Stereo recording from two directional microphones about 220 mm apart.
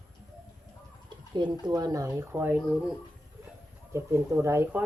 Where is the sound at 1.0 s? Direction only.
20° right (ahead or behind).